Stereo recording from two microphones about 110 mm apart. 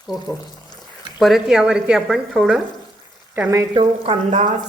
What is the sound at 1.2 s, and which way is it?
Speech, 5° right (ahead or behind).